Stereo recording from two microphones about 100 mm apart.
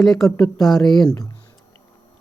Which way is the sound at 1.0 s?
35° left (ahead or behind).